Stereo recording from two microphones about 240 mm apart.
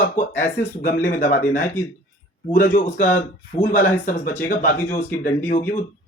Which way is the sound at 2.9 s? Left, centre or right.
Left.